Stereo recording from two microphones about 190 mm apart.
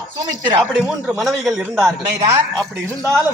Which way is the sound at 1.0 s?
Centre (ahead or behind).